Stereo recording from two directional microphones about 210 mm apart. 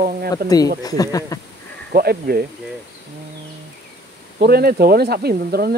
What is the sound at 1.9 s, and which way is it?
Speech, 50° right (ahead or behind).